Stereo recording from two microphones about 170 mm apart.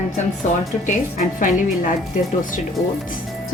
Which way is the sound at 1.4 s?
50° left (ahead or behind).